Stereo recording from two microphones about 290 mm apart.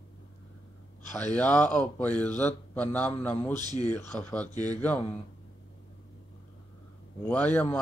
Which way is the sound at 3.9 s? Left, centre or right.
Centre.